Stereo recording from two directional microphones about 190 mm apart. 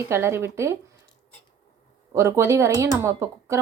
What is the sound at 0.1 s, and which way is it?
Speech, 15° right (ahead or behind).